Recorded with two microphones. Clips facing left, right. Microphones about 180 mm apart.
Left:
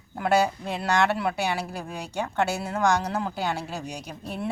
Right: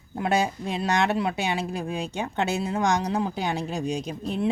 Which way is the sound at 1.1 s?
20° right (ahead or behind).